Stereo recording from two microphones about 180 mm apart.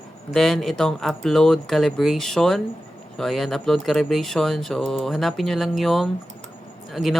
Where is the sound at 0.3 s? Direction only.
Centre (ahead or behind).